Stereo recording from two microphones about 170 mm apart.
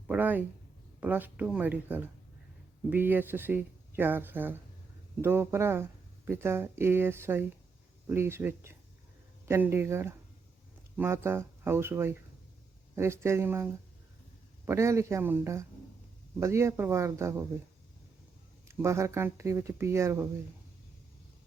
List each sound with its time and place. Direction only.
0.1 s speech: 10° right (ahead or behind)
18.7 s speech: 15° right (ahead or behind)